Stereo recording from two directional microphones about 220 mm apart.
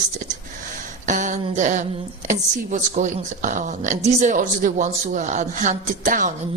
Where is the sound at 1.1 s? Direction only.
35° right (ahead or behind).